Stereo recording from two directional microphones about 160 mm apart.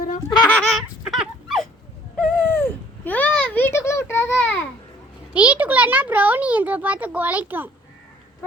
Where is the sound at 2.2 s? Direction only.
15° left (ahead or behind).